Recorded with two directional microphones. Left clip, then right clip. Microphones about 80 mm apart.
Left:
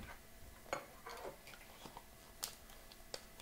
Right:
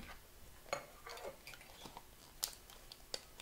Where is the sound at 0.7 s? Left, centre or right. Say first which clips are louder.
Right 1 dB; centre.